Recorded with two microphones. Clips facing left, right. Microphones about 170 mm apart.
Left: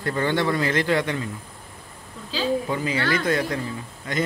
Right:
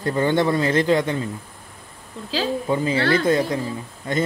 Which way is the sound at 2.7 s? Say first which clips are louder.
Right 5 dB; 30° right (ahead or behind).